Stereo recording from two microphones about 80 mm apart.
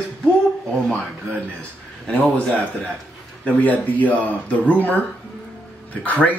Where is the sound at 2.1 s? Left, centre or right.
Centre.